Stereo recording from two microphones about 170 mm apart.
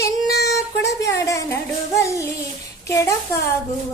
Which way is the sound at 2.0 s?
15° left (ahead or behind).